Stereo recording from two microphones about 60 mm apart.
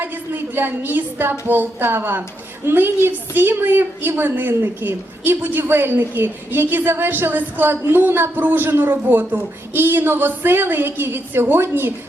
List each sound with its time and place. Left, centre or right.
0.0 s a woman's voice: right